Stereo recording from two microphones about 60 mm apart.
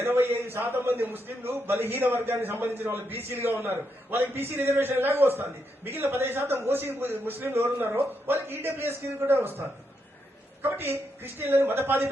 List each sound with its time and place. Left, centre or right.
0.0 s a man's voice: right